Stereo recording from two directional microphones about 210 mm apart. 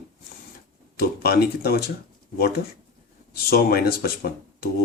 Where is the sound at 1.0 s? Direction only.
50° left (ahead or behind).